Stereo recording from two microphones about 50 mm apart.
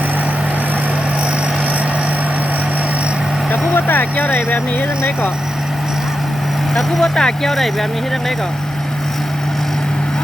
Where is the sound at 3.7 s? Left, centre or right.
Left.